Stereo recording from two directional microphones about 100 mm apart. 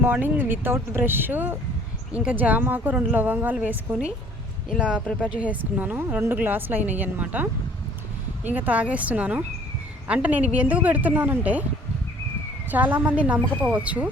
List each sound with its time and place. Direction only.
0.0 s a woman's voice: 20° right (ahead or behind)
8.4 s a woman's voice: 15° right (ahead or behind)
12.7 s a woman's voice: 15° right (ahead or behind)